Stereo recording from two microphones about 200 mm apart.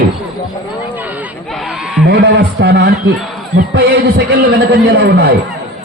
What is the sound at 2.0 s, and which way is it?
Speech, 55° right (ahead or behind).